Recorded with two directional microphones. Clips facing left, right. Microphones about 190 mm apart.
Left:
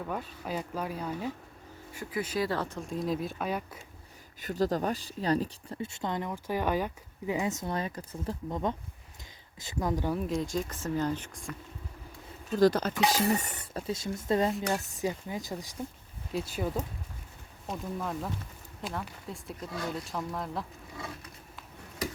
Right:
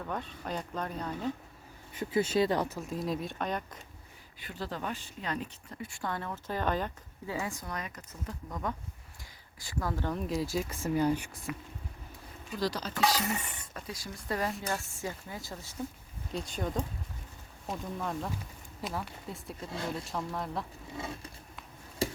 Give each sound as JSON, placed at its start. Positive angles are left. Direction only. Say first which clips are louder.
{"t": 0.1, "sound": "speech", "louder": "even", "side_deg": 5}
{"t": 1.9, "sound": "speech", "louder": "right 5 dB", "side_deg": -25}
{"t": 2.6, "sound": "speech", "louder": "left 2 dB", "side_deg": -5}
{"t": 4.4, "sound": "speech", "louder": "left 10 dB", "side_deg": 40}
{"t": 10.2, "sound": "speech", "louder": "left 1 dB", "side_deg": -5}
{"t": 12.5, "sound": "speech", "louder": "left 10 dB", "side_deg": 50}
{"t": 13.2, "sound": "speech", "louder": "left 7 dB", "side_deg": 40}
{"t": 13.8, "sound": "speech", "louder": "left 8 dB", "side_deg": 25}
{"t": 16.3, "sound": "speech", "louder": "left 2 dB", "side_deg": 5}
{"t": 20.9, "sound": "patter", "louder": "right 2 dB", "side_deg": -25}
{"t": 22.0, "sound": "tick-tock", "louder": "right 3 dB", "side_deg": -30}